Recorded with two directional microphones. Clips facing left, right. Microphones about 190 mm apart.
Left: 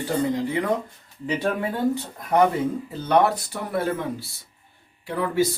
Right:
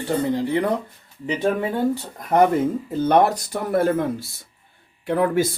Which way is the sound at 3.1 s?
45° right (ahead or behind).